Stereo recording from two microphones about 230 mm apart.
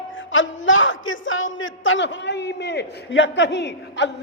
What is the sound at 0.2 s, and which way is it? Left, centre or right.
A man's voice, left.